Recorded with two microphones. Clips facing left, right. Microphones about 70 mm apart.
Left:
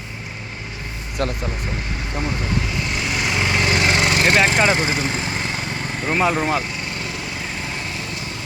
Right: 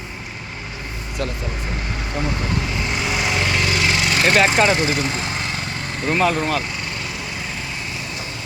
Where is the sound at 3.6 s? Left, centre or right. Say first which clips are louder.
Left 2 dB; left.